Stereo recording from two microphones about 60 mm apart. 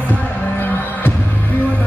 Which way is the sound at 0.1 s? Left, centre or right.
Left.